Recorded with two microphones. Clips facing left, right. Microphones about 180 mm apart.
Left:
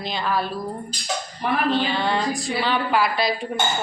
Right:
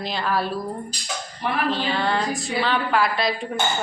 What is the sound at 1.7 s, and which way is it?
Speech, centre (ahead or behind).